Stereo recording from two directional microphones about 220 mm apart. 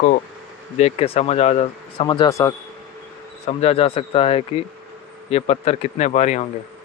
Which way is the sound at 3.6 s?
25° left (ahead or behind).